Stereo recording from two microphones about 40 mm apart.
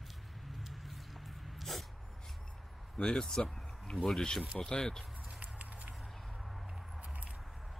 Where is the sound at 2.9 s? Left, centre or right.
Centre.